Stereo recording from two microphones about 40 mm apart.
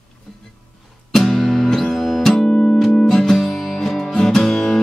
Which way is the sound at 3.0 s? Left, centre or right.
Centre.